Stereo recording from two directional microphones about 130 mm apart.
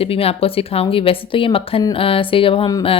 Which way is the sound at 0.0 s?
50° left (ahead or behind).